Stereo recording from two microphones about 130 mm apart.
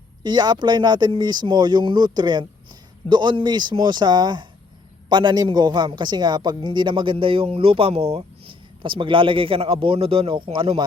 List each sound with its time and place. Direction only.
0.2 s a man's voice: 35° right (ahead or behind)